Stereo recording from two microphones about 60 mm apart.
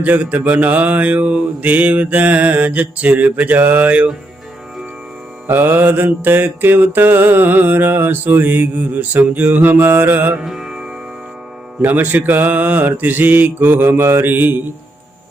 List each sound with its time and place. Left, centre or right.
0.0 s mantra: right
5.5 s mantra: right
10.4 s music: centre
11.8 s mantra: right